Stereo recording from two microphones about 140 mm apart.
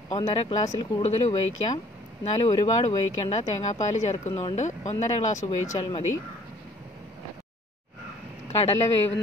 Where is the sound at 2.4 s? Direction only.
45° left (ahead or behind).